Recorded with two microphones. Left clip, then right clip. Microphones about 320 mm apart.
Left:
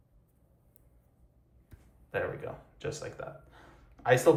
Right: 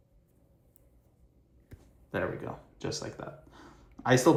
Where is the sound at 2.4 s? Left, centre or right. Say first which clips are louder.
Right 1 dB; centre.